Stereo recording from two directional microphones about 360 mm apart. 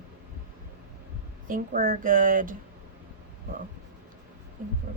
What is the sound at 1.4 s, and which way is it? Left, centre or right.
A woman's voice, right.